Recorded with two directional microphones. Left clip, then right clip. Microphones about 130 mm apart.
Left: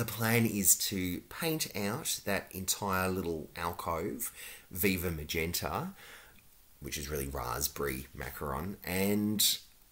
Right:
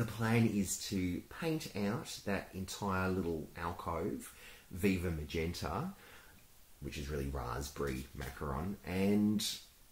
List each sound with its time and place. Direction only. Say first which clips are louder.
0.0 s speech: left 4 dB; 20° left (ahead or behind)
6.9 s speech: left 4 dB; 25° left (ahead or behind)